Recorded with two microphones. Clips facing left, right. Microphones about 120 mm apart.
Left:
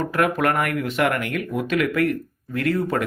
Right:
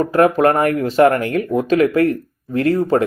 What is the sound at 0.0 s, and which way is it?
Speech, 30° right (ahead or behind).